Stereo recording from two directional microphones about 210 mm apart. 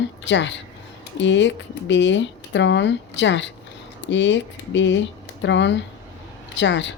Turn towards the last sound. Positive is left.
turn(degrees=60)  # may be behind; listen again after turning